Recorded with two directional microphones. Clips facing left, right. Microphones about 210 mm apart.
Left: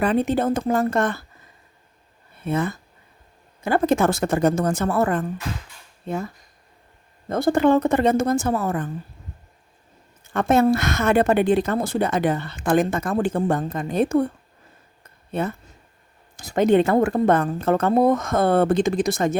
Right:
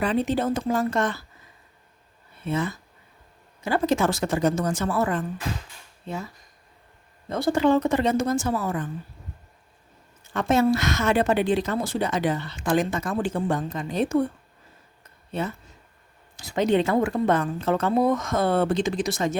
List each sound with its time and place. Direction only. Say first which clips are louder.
0.0 s a woman's voice: left 3 dB; 55° left (ahead or behind)
2.4 s a woman's voice: left 3 dB; 55° left (ahead or behind)
10.3 s a woman's voice: left 3 dB; 55° left (ahead or behind)
15.3 s a woman's voice: left 4 dB; 55° left (ahead or behind)